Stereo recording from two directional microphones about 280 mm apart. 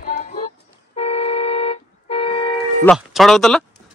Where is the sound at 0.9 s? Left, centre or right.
Left.